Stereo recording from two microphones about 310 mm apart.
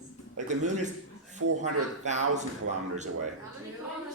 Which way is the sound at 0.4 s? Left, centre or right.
Right.